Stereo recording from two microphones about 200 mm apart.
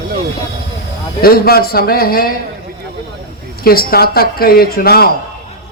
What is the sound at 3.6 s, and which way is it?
A man's voice, 50° left (ahead or behind).